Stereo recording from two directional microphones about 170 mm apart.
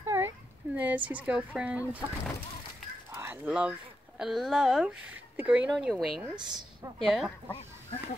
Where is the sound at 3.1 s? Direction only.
15° right (ahead or behind).